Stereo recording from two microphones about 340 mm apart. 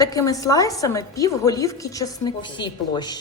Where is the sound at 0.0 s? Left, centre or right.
Centre.